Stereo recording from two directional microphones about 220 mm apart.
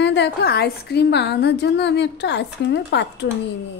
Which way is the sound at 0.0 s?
50° left (ahead or behind).